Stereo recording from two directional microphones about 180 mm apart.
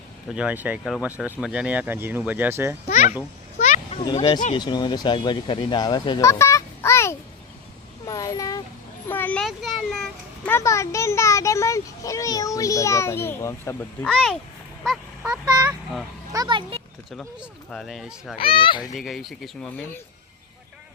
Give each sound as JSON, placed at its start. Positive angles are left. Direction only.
{"t": 0.3, "sound": "speech", "side_deg": -10}
{"t": 2.9, "sound": "speech", "side_deg": 40}
{"t": 4.0, "sound": "speech", "side_deg": 25}
{"t": 4.3, "sound": "speech", "side_deg": 40}
{"t": 4.5, "sound": "a child's voice", "side_deg": 25}
{"t": 10.5, "sound": "a child's voice", "side_deg": 15}
{"t": 16.3, "sound": "a sound", "side_deg": -25}
{"t": 17.1, "sound": "speech", "side_deg": 0}
{"t": 18.3, "sound": "speech", "side_deg": 30}
{"t": 18.9, "sound": "speech", "side_deg": 0}